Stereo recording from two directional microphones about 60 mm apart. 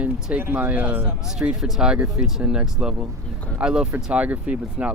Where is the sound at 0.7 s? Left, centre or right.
Right.